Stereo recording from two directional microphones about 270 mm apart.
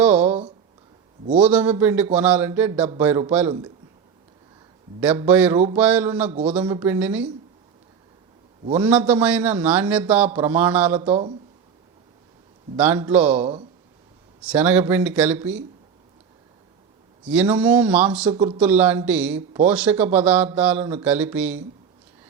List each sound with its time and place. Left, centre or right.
0.0 s a sound: centre
1.3 s a man's voice: centre
4.9 s a man's voice: centre
8.7 s a man's voice: centre
11.1 s speech: right
12.7 s a man's voice: centre
17.2 s a man's voice: centre
18.3 s speech: centre
18.6 s a man's voice: centre